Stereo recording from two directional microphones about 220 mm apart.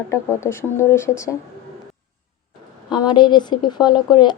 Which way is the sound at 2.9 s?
20° left (ahead or behind).